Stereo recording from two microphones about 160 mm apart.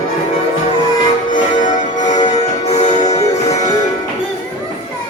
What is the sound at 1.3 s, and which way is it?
Music, 55° left (ahead or behind).